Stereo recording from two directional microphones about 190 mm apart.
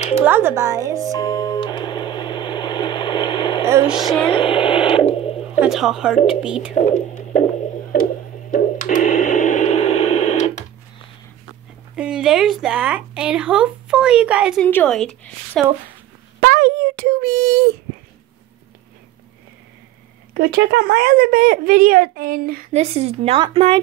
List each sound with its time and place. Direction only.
0.2 s a woman's voice: 10° right (ahead or behind)
1.0 s music: 20° left (ahead or behind)
3.6 s speech: 15° right (ahead or behind)
3.9 s a sound: 20° left (ahead or behind)
4.3 s radio: 25° left (ahead or behind)
5.6 s speech: centre (ahead or behind)
6.7 s speech: 40° left (ahead or behind)
7.9 s radio: 50° left (ahead or behind)
11.9 s speech: 5° right (ahead or behind)
16.3 s a sound: 55° right (ahead or behind)
20.3 s speech: 60° right (ahead or behind)
22.7 s a woman's voice: 35° right (ahead or behind)